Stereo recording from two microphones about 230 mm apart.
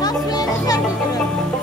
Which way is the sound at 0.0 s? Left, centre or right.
Centre.